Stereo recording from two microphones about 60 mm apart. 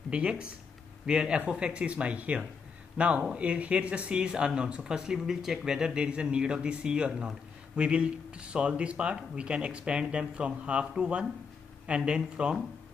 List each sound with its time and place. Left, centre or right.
0.1 s speech: centre